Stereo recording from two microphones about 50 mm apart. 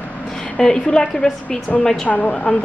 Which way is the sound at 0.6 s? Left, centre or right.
Centre.